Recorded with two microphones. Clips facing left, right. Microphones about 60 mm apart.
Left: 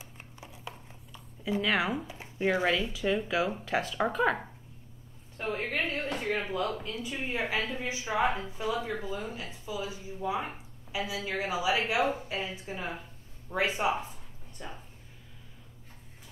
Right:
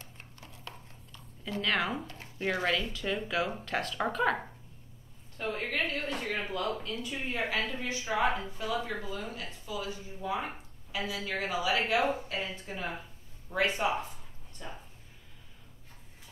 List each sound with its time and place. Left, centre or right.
0.0 s speech: centre
5.4 s a woman's voice: centre